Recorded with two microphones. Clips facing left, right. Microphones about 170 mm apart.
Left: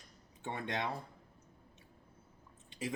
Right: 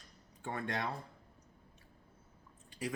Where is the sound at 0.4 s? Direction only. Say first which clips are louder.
Even; 20° left (ahead or behind).